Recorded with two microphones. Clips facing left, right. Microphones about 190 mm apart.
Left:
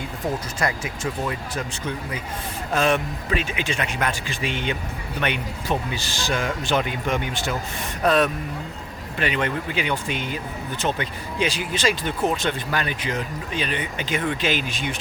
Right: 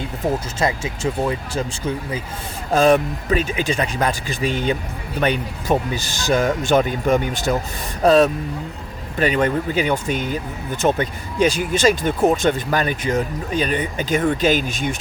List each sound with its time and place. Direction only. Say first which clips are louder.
0.6 s speech: right 4 dB; 25° right (ahead or behind)
2.7 s speech: right 7 dB; 35° right (ahead or behind)
8.0 s speech: right 6 dB; 30° right (ahead or behind)
9.1 s speech: right 6 dB; 40° right (ahead or behind)